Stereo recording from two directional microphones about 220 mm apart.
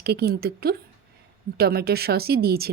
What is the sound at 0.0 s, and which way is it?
Speech, 45° right (ahead or behind).